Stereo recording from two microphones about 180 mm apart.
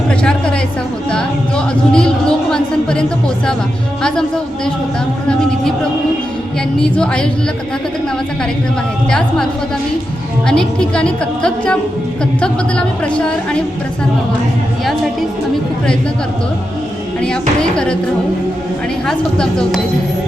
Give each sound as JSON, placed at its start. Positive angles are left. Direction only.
{"t": 0.1, "sound": "a sound", "side_deg": 5}
{"t": 1.1, "sound": "music", "side_deg": 5}
{"t": 4.0, "sound": "a woman's voice", "side_deg": 5}
{"t": 6.7, "sound": "a woman's voice", "side_deg": 5}
{"t": 9.0, "sound": "a woman's voice", "side_deg": 5}
{"t": 17.6, "sound": "a woman's voice", "side_deg": 5}
{"t": 19.0, "sound": "a woman's voice", "side_deg": 5}